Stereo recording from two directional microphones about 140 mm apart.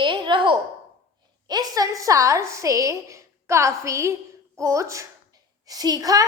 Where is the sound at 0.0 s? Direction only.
35° right (ahead or behind).